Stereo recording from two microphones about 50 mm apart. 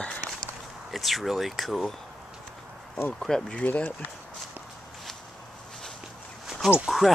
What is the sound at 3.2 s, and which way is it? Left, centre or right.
Speech, centre.